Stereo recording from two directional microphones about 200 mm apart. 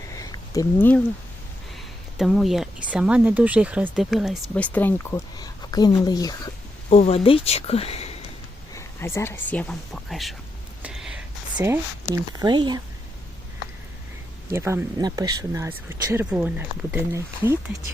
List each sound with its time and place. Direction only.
0.1 s a sound: 15° left (ahead or behind)
2.1 s speech: centre (ahead or behind); by 6.5 s 20° left (ahead or behind)
6.9 s speech: 30° left (ahead or behind)
8.7 s speech: 15° left (ahead or behind)
10.8 s whispering: 5° right (ahead or behind)
11.5 s speech: 10° right (ahead or behind)
14.5 s speech: 15° right (ahead or behind)